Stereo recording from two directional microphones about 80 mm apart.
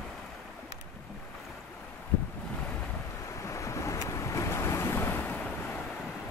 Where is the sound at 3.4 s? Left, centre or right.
Left.